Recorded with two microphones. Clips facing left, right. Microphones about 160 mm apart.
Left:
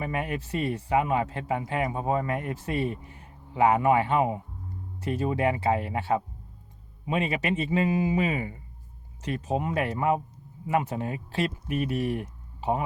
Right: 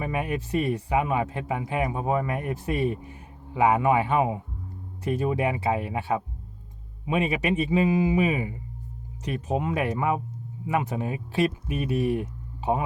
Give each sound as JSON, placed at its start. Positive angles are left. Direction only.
{"t": 0.0, "sound": "speech", "side_deg": -15}